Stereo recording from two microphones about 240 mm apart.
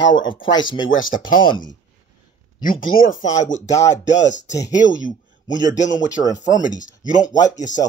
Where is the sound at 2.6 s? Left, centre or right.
Left.